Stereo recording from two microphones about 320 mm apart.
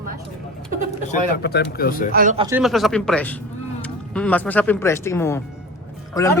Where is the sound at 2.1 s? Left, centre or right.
Right.